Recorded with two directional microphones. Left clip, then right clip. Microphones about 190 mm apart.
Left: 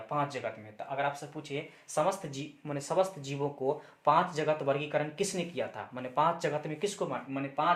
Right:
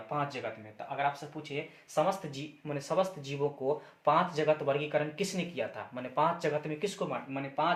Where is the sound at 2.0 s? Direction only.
30° left (ahead or behind).